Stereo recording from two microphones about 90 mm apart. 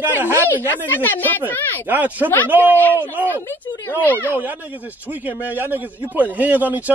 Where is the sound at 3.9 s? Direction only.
25° left (ahead or behind).